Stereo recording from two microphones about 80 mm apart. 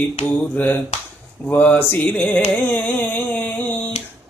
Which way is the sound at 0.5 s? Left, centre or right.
Left.